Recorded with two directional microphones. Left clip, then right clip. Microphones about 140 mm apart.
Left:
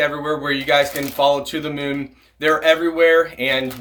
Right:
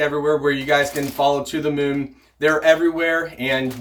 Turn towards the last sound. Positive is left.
turn(degrees=25)  # may be behind; listen again after turning